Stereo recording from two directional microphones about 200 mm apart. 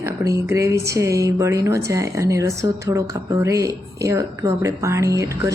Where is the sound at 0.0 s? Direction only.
15° right (ahead or behind).